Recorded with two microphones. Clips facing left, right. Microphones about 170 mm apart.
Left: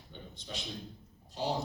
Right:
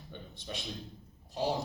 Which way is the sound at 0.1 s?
60° right (ahead or behind).